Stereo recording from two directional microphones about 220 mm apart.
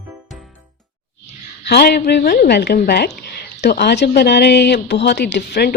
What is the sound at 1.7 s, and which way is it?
A woman's voice, 50° left (ahead or behind).